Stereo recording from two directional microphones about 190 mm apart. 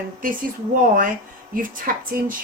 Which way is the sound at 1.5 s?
50° right (ahead or behind).